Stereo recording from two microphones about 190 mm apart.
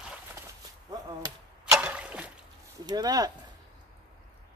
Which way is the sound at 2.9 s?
20° right (ahead or behind).